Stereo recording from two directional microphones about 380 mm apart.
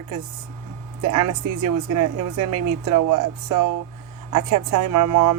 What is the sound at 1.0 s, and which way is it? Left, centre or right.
Speech, right.